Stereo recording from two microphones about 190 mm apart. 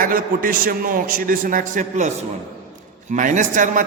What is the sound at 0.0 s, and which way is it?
A man's voice, 45° right (ahead or behind).